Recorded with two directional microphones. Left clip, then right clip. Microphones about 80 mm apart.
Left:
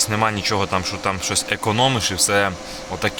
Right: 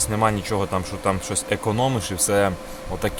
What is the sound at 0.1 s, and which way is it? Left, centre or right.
Speech, right.